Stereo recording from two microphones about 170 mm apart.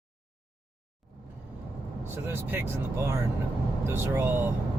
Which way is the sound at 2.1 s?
15° right (ahead or behind).